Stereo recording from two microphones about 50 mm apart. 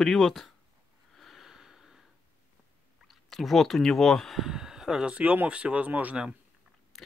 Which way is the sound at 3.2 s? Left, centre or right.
Centre.